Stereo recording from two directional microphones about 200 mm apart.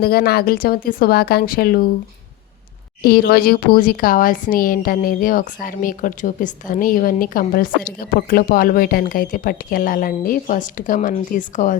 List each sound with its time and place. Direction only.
0.0 s speech: 50° left (ahead or behind)
3.0 s speech: 50° left (ahead or behind)